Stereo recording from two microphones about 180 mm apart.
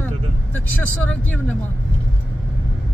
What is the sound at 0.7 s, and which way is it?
Speech, 10° left (ahead or behind).